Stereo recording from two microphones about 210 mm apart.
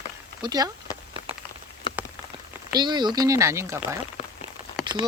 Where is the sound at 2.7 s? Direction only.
20° right (ahead or behind).